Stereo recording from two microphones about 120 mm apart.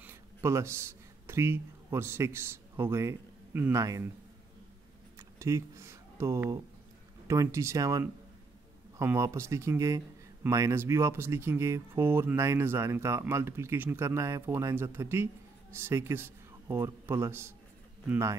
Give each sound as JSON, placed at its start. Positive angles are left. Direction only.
{"t": 0.0, "sound": "speech", "side_deg": -20}
{"t": 5.4, "sound": "a man's voice", "side_deg": -25}